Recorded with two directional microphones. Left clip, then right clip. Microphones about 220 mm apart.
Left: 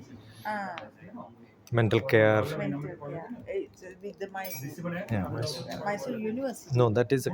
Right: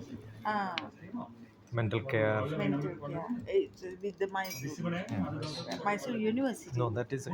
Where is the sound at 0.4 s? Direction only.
5° right (ahead or behind).